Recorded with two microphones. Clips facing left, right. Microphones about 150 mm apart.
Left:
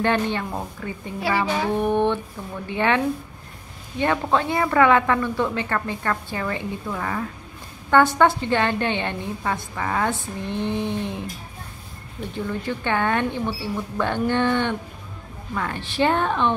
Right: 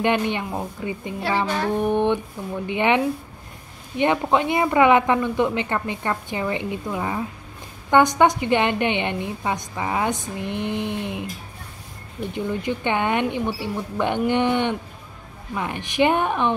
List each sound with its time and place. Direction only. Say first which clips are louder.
0.0 s a woman's voice: right 1 dB; 15° right (ahead or behind)
1.4 s music: even; 5° left (ahead or behind)
2.4 s a woman's voice: right 2 dB; 15° right (ahead or behind)
4.0 s a woman's voice: right 2 dB; 20° right (ahead or behind)
12.4 s a woman's voice: right 2 dB; 15° right (ahead or behind)